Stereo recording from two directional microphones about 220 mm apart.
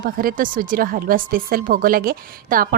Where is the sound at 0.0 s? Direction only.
40° right (ahead or behind).